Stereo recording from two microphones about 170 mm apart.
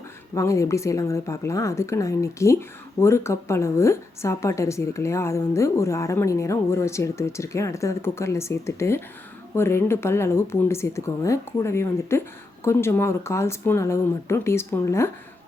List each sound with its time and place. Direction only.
0.3 s speech: 20° left (ahead or behind)